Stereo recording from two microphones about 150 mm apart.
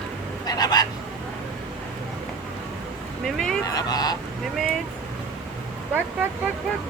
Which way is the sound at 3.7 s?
25° left (ahead or behind).